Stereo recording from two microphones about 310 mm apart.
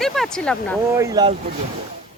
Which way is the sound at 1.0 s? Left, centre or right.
Centre.